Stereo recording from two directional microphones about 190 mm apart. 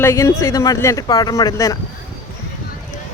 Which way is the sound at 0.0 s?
15° left (ahead or behind).